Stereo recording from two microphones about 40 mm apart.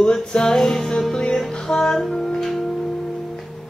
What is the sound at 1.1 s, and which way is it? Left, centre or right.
Music, centre.